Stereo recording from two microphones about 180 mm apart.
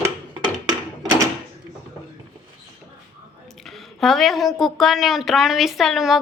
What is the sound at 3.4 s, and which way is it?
A woman's voice, centre (ahead or behind).